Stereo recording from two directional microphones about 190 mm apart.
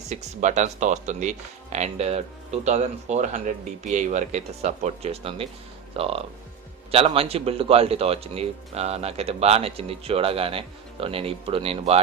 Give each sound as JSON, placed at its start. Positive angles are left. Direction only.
{"t": 0.1, "sound": "speech", "side_deg": -40}